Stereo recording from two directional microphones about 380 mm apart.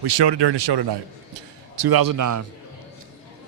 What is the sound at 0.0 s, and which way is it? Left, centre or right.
Speech, right.